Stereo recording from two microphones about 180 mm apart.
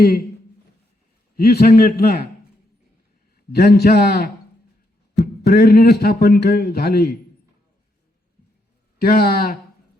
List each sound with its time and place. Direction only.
1.4 s speech: 60° left (ahead or behind)
3.3 s speech: 60° left (ahead or behind)
9.0 s speech: 60° left (ahead or behind)